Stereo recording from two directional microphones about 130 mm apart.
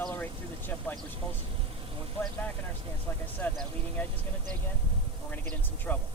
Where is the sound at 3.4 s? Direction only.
10° left (ahead or behind).